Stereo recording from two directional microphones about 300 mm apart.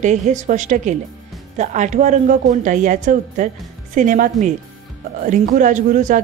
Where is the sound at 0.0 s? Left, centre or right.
Right.